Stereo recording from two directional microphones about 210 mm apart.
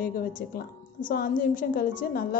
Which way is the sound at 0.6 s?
40° left (ahead or behind).